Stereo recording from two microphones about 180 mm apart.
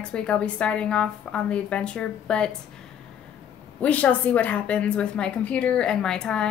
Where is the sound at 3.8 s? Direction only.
10° left (ahead or behind).